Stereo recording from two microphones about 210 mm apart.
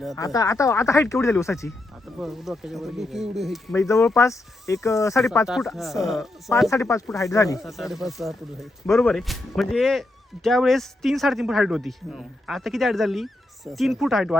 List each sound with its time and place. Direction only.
0.3 s speech: 15° left (ahead or behind)
2.1 s speech: centre (ahead or behind)
3.8 s speech: 15° left (ahead or behind)
5.5 s speech: centre (ahead or behind)
6.7 s speech: 15° left (ahead or behind)
7.6 s speech: centre (ahead or behind)